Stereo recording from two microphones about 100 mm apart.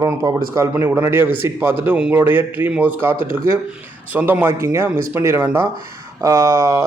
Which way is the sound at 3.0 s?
25° right (ahead or behind).